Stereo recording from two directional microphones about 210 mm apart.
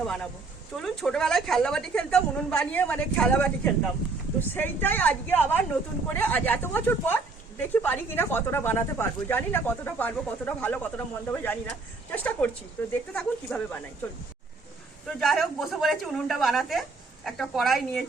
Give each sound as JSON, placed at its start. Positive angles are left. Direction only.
{"t": 0.8, "sound": "a woman's voice", "side_deg": 0}
{"t": 15.0, "sound": "a woman's voice", "side_deg": 0}